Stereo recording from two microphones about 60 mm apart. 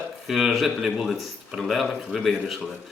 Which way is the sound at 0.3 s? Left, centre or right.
Centre.